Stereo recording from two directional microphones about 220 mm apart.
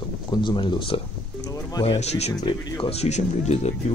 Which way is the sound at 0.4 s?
20° left (ahead or behind).